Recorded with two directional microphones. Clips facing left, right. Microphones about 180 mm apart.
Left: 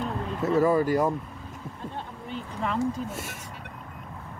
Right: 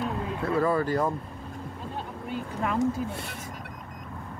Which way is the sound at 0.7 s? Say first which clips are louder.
Left 3 dB; 20° left (ahead or behind).